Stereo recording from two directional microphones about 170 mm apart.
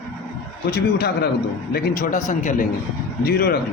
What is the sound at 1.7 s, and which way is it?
Speech, 55° left (ahead or behind).